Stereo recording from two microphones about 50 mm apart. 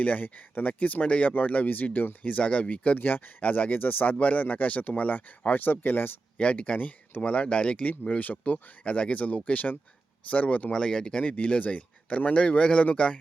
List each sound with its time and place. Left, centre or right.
0.0 s speech: left
6.4 s speech: left
8.2 s speech: left
8.8 s speech: left
10.7 s speech: centre
11.2 s speech: left